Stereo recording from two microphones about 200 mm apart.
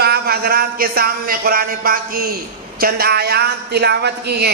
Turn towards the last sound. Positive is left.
turn(degrees=-55)  # may be behind; listen again after turning